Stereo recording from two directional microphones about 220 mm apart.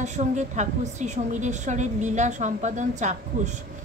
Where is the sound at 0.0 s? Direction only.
30° right (ahead or behind).